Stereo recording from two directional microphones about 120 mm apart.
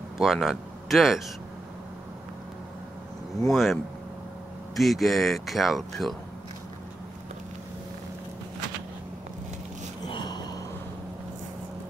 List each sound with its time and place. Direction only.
0.2 s speech: 5° right (ahead or behind)
3.4 s speech: centre (ahead or behind)
10.0 s a sound: 40° left (ahead or behind)